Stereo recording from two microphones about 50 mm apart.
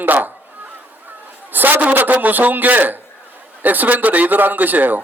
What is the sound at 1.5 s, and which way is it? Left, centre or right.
A man's voice, right.